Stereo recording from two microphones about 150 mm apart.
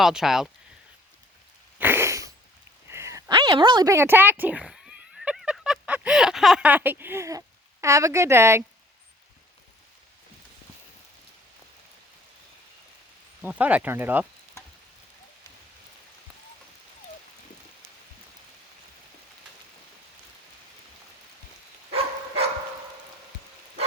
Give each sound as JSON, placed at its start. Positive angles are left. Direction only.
{"t": 0.0, "sound": "speech", "side_deg": -5}
{"t": 1.8, "sound": "sneeze", "side_deg": -15}
{"t": 2.9, "sound": "a sound", "side_deg": -20}
{"t": 3.3, "sound": "speech", "side_deg": -30}
{"t": 13.4, "sound": "speech", "side_deg": -10}